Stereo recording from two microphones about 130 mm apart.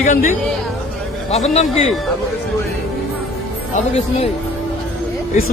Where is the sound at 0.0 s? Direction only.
90° left.